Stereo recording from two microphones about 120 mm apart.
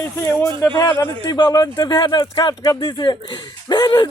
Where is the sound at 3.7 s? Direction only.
35° left (ahead or behind).